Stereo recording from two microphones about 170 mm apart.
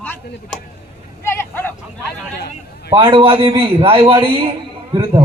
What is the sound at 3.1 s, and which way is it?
A man's voice, 30° right (ahead or behind).